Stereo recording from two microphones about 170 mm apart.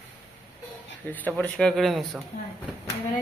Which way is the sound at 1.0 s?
10° left (ahead or behind).